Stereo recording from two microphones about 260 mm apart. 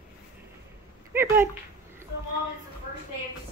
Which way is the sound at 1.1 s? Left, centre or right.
Centre.